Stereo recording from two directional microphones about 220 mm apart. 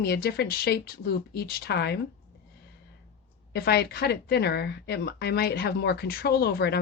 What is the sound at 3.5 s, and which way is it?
Speech, 45° left (ahead or behind).